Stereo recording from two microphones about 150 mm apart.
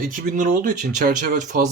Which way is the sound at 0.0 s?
60° right (ahead or behind).